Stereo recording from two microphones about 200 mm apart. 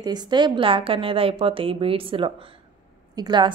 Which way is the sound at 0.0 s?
20° right (ahead or behind).